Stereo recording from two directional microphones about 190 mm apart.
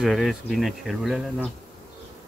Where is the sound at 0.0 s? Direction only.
Centre (ahead or behind).